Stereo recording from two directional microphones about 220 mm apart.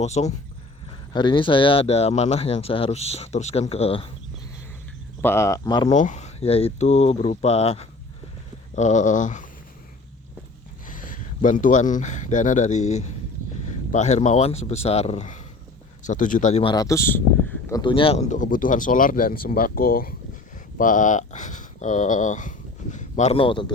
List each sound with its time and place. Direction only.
0.0 s speech: 30° left (ahead or behind)
5.2 s speech: 10° left (ahead or behind)
5.9 s speech: 35° left (ahead or behind)
10.8 s speech: 35° left (ahead or behind)